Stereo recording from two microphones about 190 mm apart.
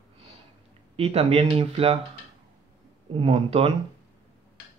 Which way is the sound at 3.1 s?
30° right (ahead or behind).